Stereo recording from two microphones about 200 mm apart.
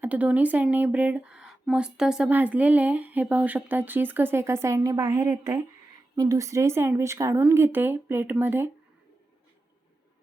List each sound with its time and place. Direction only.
0.0 s speech: 10° right (ahead or behind)